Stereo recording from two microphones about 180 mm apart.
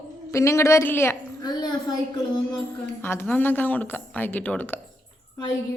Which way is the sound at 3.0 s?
10° left (ahead or behind).